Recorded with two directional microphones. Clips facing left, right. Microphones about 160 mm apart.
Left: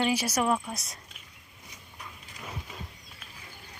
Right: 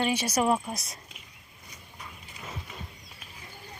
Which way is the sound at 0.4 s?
15° right (ahead or behind).